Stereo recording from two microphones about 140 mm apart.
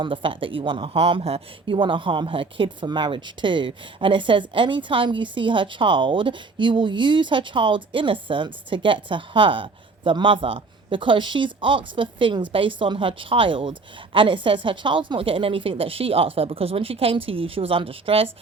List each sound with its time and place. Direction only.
0.0 s speech: 40° right (ahead or behind)